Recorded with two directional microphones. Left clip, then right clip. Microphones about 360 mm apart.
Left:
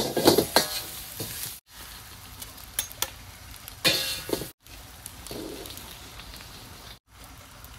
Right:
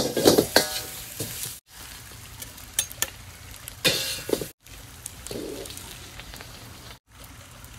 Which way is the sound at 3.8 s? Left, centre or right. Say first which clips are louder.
Even; centre.